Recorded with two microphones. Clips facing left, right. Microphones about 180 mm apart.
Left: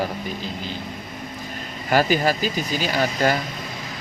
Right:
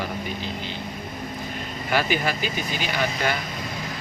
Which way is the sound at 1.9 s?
40° left (ahead or behind).